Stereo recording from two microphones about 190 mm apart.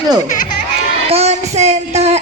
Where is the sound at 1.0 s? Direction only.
35° right (ahead or behind).